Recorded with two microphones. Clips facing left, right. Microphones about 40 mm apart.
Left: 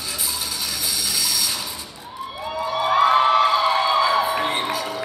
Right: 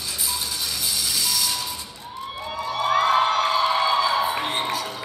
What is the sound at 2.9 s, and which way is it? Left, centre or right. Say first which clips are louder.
Music: left 4 dB; centre.